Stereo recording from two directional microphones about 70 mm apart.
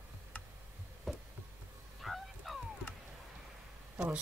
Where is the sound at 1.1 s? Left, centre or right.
Centre.